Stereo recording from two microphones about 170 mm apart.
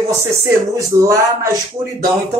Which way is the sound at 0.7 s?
15° right (ahead or behind).